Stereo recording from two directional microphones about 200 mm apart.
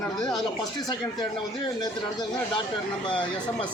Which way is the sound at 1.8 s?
20° left (ahead or behind).